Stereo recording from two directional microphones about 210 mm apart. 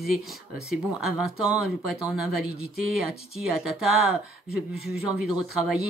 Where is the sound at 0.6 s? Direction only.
5° right (ahead or behind).